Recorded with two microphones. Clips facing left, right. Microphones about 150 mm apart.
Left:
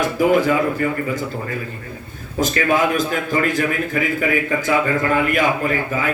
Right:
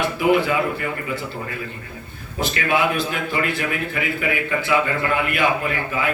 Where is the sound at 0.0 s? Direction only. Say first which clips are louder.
Left 2 dB; 40° left (ahead or behind).